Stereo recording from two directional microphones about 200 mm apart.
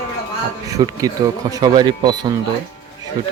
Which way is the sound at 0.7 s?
15° right (ahead or behind).